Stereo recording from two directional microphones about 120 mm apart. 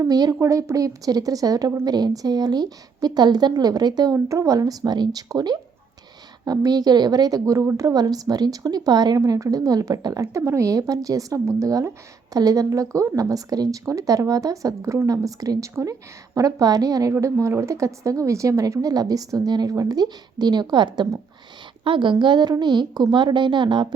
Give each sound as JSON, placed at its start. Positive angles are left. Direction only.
{"t": 0.0, "sound": "a woman's voice", "side_deg": -30}